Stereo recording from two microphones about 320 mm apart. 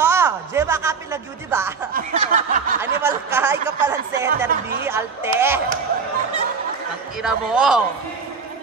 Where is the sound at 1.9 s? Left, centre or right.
Right.